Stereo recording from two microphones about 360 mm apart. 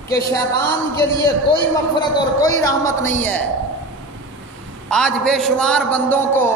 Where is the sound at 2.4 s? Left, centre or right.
Centre.